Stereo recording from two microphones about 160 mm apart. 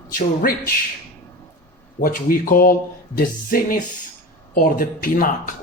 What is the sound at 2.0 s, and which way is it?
Speech, 60° left (ahead or behind).